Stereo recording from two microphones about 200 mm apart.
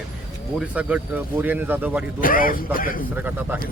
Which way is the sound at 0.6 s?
5° right (ahead or behind).